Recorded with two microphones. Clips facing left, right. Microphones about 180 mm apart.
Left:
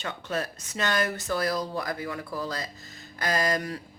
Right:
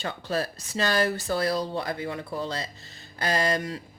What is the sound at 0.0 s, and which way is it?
Speech, 35° right (ahead or behind).